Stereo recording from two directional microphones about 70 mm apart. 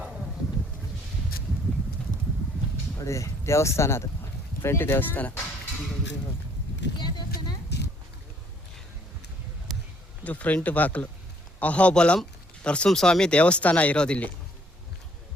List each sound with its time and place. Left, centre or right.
3.0 s speech: left
6.9 s a sound: left
10.2 s speech: left